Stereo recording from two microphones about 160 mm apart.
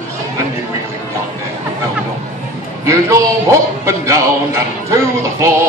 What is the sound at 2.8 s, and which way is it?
A man's voice, 20° right (ahead or behind).